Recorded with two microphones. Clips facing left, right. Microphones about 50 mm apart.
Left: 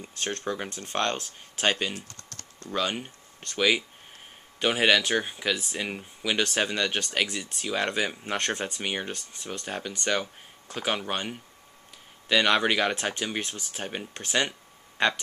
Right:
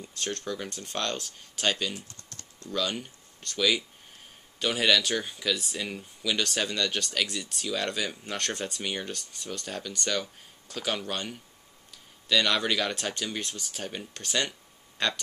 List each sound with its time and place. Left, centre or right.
0.0 s speech: left
2.0 s computer keyboard: left
2.7 s speech: left